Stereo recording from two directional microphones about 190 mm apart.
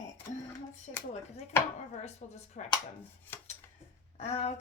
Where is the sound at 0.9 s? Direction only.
35° left (ahead or behind).